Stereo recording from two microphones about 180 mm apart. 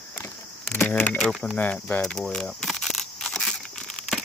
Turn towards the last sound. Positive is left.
turn(degrees=5)  # may be behind; listen again after turning